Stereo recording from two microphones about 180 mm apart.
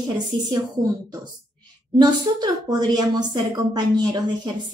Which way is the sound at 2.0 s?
20° right (ahead or behind).